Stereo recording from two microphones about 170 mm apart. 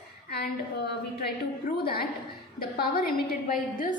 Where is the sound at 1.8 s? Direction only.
60° left (ahead or behind).